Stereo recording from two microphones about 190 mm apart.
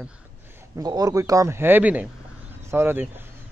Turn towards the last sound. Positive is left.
turn(degrees=-10)  # may be behind; listen again after turning